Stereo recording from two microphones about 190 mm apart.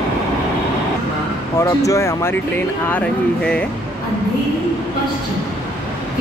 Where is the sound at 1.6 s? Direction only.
15° left (ahead or behind).